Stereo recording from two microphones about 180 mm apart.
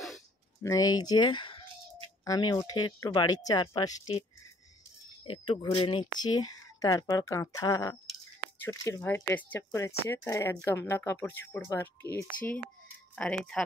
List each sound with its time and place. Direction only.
0.6 s speech: 20° left (ahead or behind)
5.2 s speech: 30° left (ahead or behind); by 13.7 s 5° left (ahead or behind)